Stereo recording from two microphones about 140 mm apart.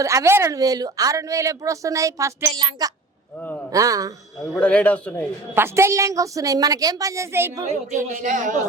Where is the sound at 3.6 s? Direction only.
25° right (ahead or behind).